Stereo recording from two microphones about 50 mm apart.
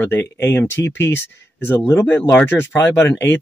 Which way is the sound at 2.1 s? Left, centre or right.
Left.